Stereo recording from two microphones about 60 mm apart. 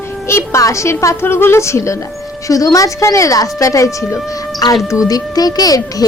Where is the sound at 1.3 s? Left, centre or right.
Left.